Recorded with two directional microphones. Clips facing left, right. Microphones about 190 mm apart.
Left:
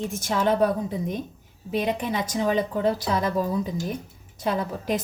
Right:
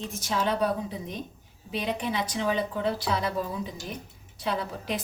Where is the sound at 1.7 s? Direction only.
50° left (ahead or behind).